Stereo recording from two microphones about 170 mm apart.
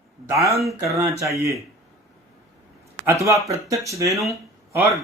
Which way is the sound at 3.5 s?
20° right (ahead or behind).